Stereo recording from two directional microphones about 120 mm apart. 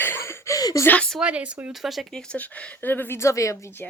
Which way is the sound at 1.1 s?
10° right (ahead or behind).